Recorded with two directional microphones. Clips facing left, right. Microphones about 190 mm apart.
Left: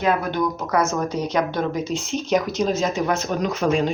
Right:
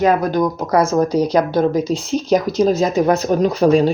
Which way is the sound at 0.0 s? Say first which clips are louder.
Right 6 dB; 40° right (ahead or behind).